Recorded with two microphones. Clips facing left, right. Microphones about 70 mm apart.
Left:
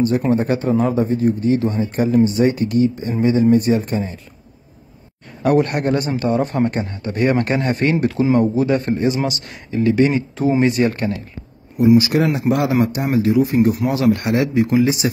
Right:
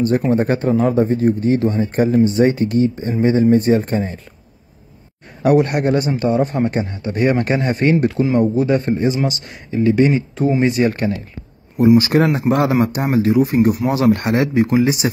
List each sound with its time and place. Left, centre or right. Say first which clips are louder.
0.3 s speech: right 1 dB; right
5.4 s a man's voice: right 2 dB; centre
12.0 s speech: right 2 dB; right